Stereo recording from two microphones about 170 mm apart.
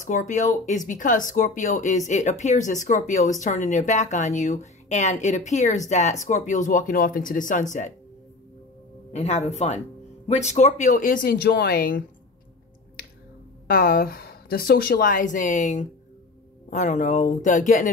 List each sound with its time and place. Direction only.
0.0 s speech: 45° left (ahead or behind)
9.1 s speech: 40° left (ahead or behind); by 12.0 s 60° left (ahead or behind)
13.7 s speech: 60° left (ahead or behind)